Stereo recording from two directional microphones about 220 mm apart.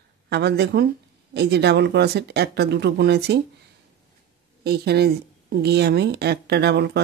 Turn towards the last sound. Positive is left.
turn(degrees=-50)  # may be behind; listen again after turning